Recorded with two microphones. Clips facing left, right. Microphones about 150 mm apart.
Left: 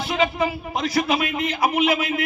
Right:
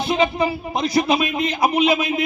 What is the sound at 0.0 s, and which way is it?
Speech, 20° right (ahead or behind).